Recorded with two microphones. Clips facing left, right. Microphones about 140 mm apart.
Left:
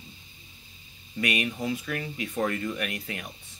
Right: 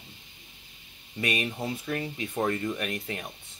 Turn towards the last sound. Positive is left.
turn(degrees=-25)  # may be behind; listen again after turning